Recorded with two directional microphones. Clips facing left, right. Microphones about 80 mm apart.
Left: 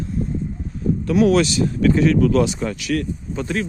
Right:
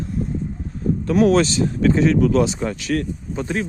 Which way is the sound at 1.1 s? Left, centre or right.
Right.